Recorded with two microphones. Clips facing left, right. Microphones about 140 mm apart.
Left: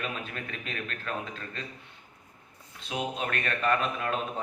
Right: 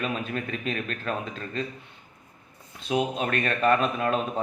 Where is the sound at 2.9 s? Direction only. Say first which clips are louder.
Right 6 dB; 20° right (ahead or behind).